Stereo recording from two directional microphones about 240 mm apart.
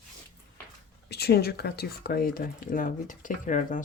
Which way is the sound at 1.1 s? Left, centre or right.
Left.